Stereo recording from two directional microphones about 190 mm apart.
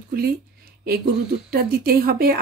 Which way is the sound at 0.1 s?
50° right (ahead or behind).